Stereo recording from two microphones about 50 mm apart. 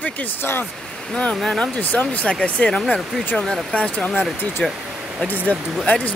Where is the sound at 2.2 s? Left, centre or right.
Left.